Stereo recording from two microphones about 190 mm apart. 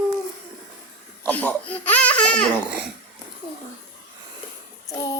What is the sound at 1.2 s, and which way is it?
Speech, 10° left (ahead or behind).